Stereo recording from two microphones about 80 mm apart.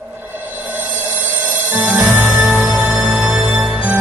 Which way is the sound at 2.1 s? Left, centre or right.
Right.